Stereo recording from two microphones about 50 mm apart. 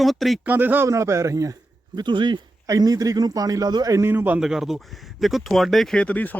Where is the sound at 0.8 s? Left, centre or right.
Right.